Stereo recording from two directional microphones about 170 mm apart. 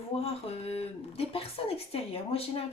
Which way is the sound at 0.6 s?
35° left (ahead or behind).